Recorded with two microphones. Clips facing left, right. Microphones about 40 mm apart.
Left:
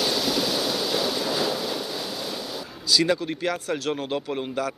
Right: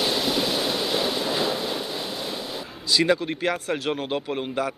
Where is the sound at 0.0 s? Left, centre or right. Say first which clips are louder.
Right 1 dB; centre.